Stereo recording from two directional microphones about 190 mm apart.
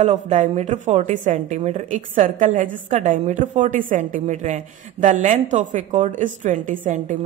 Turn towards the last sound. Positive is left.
turn(degrees=-45)  # may be behind; listen again after turning